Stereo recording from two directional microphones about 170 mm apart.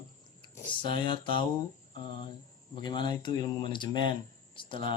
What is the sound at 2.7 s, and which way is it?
Speech, 25° left (ahead or behind).